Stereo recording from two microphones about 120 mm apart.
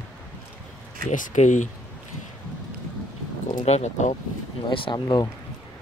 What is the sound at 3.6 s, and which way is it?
Speech, 70° left (ahead or behind).